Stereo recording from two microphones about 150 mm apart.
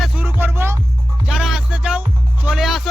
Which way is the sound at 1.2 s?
5° right (ahead or behind).